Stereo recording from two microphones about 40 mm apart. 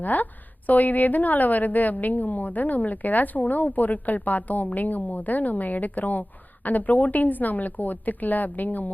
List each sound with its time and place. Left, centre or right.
0.0 s a woman's voice: left